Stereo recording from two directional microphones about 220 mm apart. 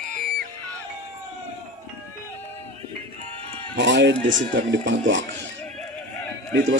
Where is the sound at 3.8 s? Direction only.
55° right (ahead or behind).